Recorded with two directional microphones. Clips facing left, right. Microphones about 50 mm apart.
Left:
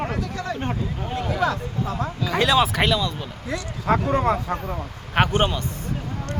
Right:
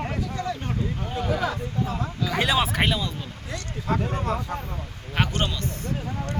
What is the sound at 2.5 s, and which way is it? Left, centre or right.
Speech, left.